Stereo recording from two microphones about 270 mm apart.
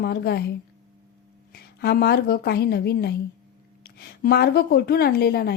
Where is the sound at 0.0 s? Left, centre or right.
Left.